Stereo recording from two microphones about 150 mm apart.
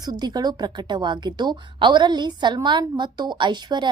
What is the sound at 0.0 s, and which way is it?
A woman's voice, 25° right (ahead or behind).